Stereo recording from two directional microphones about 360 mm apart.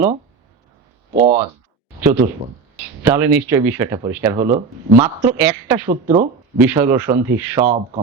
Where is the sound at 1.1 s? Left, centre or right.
Right.